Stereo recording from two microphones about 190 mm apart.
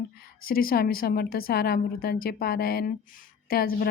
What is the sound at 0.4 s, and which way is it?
Speech, 50° left (ahead or behind).